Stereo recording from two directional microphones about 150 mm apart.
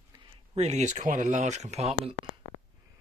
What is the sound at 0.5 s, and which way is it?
Speech, 50° right (ahead or behind).